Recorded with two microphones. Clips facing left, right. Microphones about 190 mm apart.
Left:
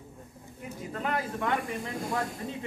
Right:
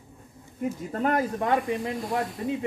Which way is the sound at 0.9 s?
45° right (ahead or behind).